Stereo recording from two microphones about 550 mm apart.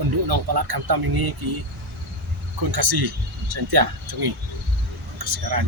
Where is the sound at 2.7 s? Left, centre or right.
Right.